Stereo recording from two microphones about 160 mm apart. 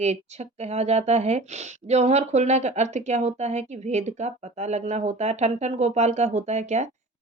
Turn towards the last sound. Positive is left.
turn(degrees=-45)  # may be behind; listen again after turning